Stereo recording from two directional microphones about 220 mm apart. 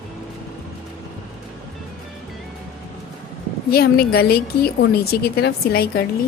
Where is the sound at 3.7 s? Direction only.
45° left (ahead or behind).